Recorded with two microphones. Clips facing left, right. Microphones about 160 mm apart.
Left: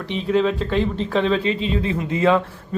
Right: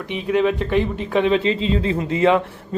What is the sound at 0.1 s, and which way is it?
Speech, 15° right (ahead or behind).